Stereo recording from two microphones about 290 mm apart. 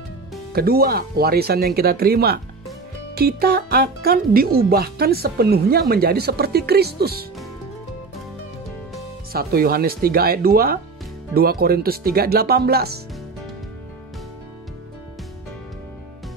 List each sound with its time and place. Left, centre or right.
0.5 s speech: right
9.3 s speech: right